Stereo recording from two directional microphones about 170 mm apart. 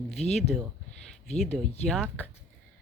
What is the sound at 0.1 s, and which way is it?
Speech, 40° left (ahead or behind).